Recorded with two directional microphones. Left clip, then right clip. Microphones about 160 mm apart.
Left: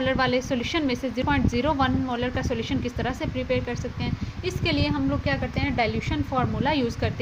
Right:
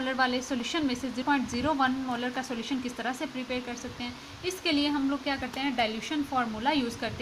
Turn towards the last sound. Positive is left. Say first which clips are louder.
# left 4 dB
turn(degrees=40)  # may be behind; listen again after turning